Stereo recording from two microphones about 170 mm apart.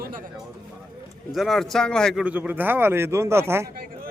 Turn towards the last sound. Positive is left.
turn(degrees=-15)  # may be behind; listen again after turning